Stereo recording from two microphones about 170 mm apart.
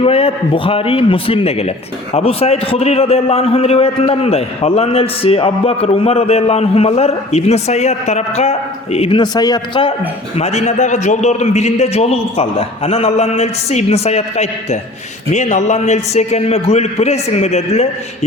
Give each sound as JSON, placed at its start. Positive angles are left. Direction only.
{"t": 0.0, "sound": "a man's voice", "side_deg": 35}
{"t": 10.3, "sound": "a man's voice", "side_deg": 40}